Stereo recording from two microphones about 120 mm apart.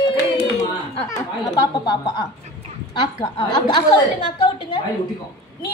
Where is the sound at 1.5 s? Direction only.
35° left (ahead or behind).